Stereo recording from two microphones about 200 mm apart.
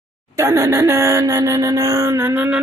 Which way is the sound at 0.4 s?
15° right (ahead or behind).